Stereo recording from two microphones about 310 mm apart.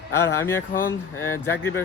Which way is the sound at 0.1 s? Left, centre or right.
Centre.